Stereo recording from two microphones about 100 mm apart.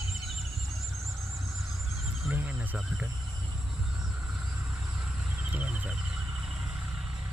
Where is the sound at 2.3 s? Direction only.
20° right (ahead or behind).